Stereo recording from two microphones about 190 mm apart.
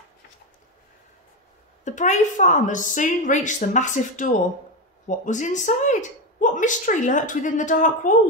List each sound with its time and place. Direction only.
1.9 s speech: 40° left (ahead or behind)